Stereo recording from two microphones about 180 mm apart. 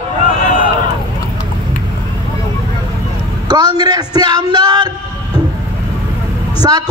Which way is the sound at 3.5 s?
25° right (ahead or behind).